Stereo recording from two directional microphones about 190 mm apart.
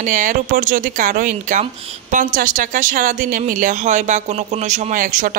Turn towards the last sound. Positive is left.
turn(degrees=-45)  # may be behind; listen again after turning